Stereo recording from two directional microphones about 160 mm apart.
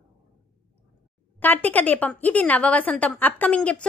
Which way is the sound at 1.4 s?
10° left (ahead or behind).